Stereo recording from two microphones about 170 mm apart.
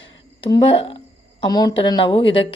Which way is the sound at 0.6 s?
30° left (ahead or behind).